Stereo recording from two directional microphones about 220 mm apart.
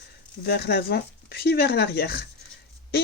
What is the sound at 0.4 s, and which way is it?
Speech, 45° left (ahead or behind).